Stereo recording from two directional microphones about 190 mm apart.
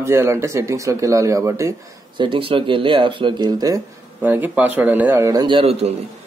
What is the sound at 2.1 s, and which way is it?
Speech, 25° right (ahead or behind).